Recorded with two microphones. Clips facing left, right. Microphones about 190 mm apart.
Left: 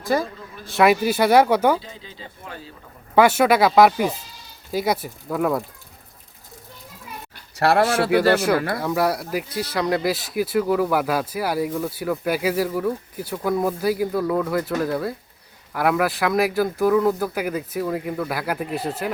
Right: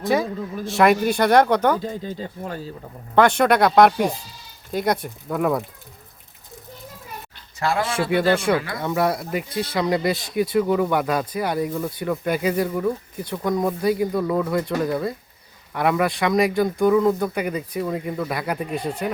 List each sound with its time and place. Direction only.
0.0 s speech: centre (ahead or behind)
1.8 s speech: 45° right (ahead or behind)
3.2 s speech: 5° left (ahead or behind)
7.5 s speech: 65° left (ahead or behind)
8.8 s speech: centre (ahead or behind)